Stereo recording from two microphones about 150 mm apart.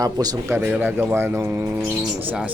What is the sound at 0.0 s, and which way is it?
Speech, 25° right (ahead or behind).